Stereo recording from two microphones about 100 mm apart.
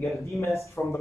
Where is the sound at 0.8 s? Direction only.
20° left (ahead or behind).